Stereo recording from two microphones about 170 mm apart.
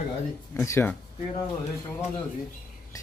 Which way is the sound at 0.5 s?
15° left (ahead or behind).